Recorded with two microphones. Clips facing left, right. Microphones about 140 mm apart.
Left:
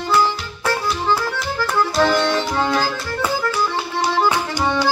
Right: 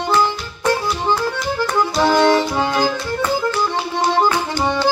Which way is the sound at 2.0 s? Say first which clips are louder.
Right 5 dB; 15° right (ahead or behind).